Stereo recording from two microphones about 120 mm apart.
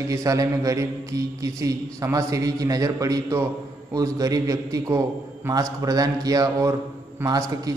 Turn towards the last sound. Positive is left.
turn(degrees=-30)  # may be behind; listen again after turning